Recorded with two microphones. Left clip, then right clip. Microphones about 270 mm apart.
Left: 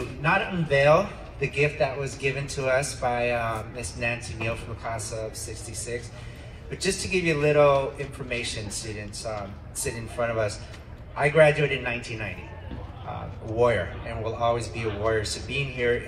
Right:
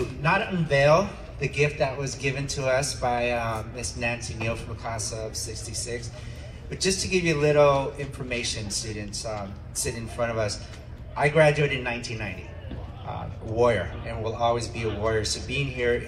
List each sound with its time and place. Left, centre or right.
0.2 s a man's voice: centre
13.6 s a man's voice: centre